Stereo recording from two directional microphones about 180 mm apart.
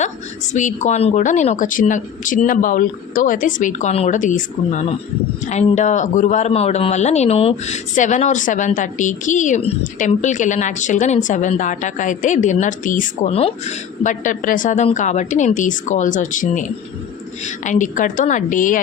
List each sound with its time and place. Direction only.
0.5 s a woman's voice: 40° left (ahead or behind)